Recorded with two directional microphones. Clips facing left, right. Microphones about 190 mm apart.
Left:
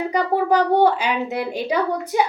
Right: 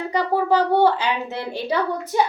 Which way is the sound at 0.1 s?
15° left (ahead or behind).